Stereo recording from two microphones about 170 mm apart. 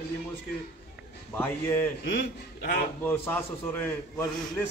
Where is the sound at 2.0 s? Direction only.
75° left (ahead or behind).